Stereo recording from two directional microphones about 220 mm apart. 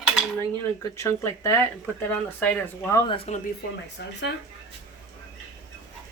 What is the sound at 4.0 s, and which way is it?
Speech, 50° left (ahead or behind).